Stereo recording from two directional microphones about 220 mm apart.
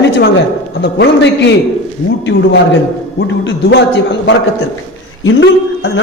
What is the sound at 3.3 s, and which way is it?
A man's voice, 55° left (ahead or behind).